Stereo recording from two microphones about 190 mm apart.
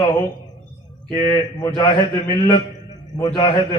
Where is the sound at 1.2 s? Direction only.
15° left (ahead or behind).